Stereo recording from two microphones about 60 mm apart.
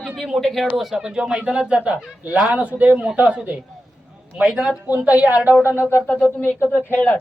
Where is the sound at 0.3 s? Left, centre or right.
Centre; by 3.5 s right.